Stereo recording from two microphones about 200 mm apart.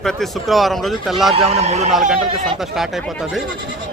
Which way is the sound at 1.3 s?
30° right (ahead or behind).